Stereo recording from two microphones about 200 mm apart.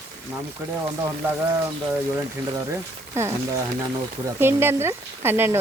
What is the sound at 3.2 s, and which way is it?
Speech, 15° right (ahead or behind).